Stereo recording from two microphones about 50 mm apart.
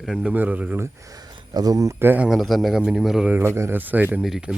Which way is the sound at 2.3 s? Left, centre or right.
Centre.